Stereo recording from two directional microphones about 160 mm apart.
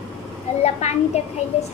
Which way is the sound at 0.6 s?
45° left (ahead or behind).